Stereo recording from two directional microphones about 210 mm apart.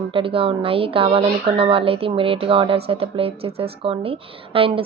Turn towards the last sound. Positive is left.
turn(degrees=-25)  # may be behind; listen again after turning